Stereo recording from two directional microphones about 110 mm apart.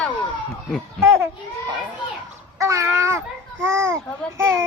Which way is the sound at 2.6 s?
30° right (ahead or behind).